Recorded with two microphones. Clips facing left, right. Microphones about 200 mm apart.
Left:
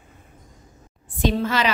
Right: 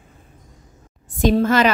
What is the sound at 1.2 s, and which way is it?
Speech, 45° right (ahead or behind).